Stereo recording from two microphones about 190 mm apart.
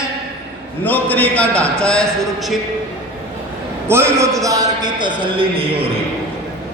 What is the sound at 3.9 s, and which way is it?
A man's voice, 15° right (ahead or behind).